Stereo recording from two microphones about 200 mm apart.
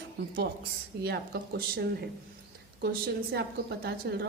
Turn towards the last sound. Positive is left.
turn(degrees=-50)  # may be behind; listen again after turning